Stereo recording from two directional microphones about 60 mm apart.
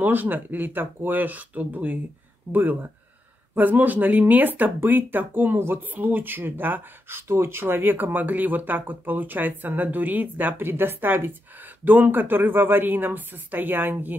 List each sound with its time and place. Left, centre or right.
0.0 s speech: right